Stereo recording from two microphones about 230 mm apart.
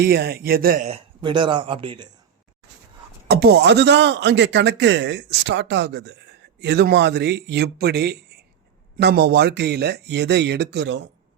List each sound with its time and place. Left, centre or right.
0.0 s speech: right
0.9 s speech: right
3.2 s a man's voice: right